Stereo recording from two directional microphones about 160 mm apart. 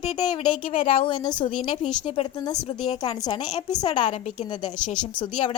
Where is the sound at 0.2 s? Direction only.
30° left (ahead or behind).